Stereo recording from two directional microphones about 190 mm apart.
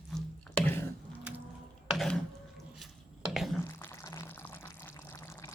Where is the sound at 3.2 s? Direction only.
Centre (ahead or behind).